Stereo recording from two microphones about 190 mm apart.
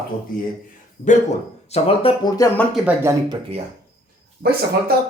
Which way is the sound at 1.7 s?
30° left (ahead or behind).